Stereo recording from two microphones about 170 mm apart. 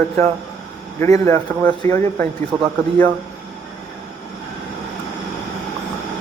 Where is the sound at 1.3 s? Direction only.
15° left (ahead or behind).